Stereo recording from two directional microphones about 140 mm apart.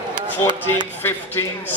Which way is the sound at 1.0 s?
15° left (ahead or behind).